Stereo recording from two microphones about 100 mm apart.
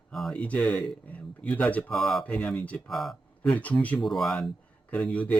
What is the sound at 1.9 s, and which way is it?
Speech, centre (ahead or behind).